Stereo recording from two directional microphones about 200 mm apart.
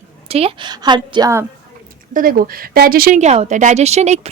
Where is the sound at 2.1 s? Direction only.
45° right (ahead or behind).